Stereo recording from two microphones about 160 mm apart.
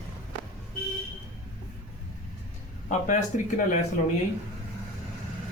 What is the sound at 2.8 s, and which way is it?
Speech, 55° left (ahead or behind).